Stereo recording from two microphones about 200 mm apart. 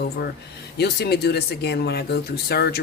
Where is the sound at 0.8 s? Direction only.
55° left (ahead or behind).